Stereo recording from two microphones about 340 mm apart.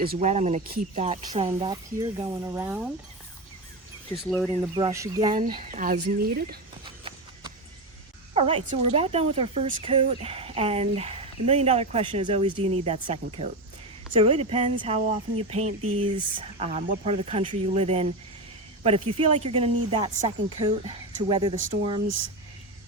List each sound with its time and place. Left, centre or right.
0.0 s speech: right; by 2.9 s centre
4.3 s speech: centre
4.6 s speech: centre
5.3 s speech: right
6.8 s clip-clop: centre
8.4 s speech: centre
15.8 s speech: right
16.4 s speech: centre